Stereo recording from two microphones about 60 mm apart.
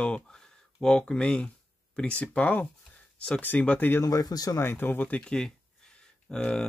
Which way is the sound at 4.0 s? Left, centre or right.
Left.